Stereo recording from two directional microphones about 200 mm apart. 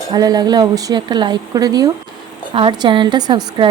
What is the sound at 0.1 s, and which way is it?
Speech, 20° right (ahead or behind).